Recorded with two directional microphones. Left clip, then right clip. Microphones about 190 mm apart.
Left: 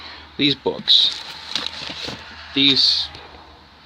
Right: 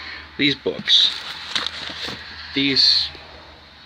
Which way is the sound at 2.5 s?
20° left (ahead or behind).